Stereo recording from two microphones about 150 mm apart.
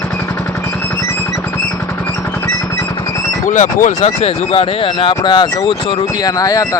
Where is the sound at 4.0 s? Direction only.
40° left (ahead or behind).